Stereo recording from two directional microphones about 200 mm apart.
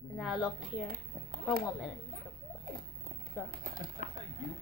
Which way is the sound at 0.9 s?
45° right (ahead or behind).